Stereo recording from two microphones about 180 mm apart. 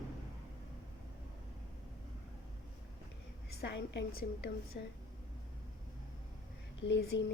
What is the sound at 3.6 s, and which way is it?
Speech, 75° left (ahead or behind).